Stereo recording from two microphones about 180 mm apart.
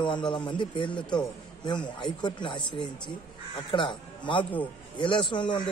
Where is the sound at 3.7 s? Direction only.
25° left (ahead or behind).